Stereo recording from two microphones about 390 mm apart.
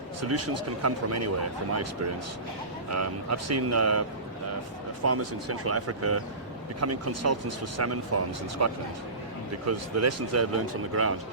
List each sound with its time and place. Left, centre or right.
0.2 s speech: right
5.0 s speech: right